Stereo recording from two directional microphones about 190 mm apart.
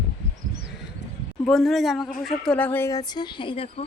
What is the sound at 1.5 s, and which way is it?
A woman's voice, centre (ahead or behind).